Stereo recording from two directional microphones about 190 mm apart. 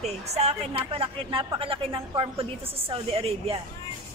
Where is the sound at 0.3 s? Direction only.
35° right (ahead or behind).